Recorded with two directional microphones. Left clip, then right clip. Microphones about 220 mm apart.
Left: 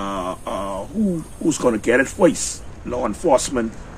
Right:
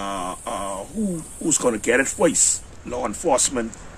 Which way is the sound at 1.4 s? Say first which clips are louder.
Left 2 dB; 20° right (ahead or behind).